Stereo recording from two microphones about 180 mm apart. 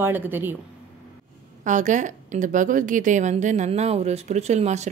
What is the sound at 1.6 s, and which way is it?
Speech, 45° right (ahead or behind).